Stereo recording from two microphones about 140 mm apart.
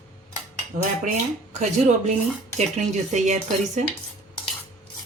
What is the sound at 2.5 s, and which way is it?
Speech, 55° right (ahead or behind).